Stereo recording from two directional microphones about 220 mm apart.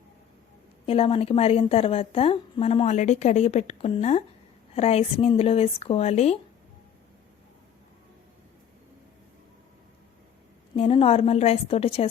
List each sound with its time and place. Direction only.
0.9 s a woman's voice: 25° left (ahead or behind)
10.8 s a woman's voice: 25° left (ahead or behind)